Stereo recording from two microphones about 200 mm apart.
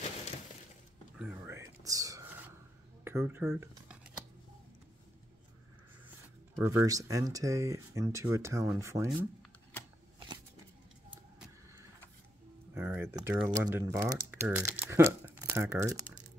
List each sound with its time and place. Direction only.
1.1 s a sound: 10° right (ahead or behind)
3.0 s computer keyboard: 10° right (ahead or behind)
6.5 s speech: 15° right (ahead or behind)
12.7 s speech: 10° right (ahead or behind)